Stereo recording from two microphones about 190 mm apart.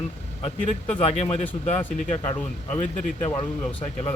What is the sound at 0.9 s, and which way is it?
Speech, 35° left (ahead or behind).